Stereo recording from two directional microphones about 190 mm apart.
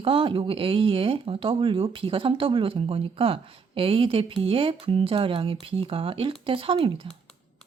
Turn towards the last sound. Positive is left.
turn(degrees=-30)  # may be behind; listen again after turning